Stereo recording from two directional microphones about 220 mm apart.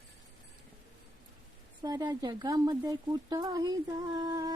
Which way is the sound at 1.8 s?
20° right (ahead or behind).